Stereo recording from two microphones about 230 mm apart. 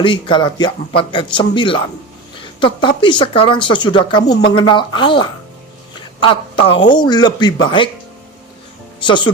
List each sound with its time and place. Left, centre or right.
0.0 s speech: left
9.0 s speech: left